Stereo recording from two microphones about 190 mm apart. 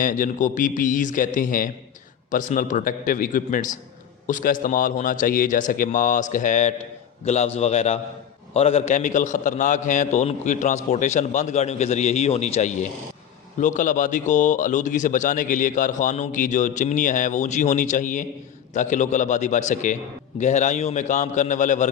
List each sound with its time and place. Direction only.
0.0 s a man's voice: 45° left (ahead or behind)